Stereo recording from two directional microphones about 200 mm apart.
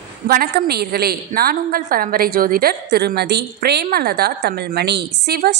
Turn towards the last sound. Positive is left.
turn(degrees=-55)  # may be behind; listen again after turning